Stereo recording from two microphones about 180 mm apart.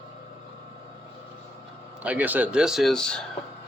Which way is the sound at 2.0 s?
10° right (ahead or behind).